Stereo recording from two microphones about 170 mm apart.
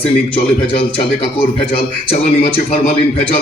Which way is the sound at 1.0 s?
35° left (ahead or behind).